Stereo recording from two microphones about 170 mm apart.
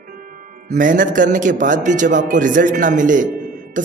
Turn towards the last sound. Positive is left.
turn(degrees=-50)  # may be behind; listen again after turning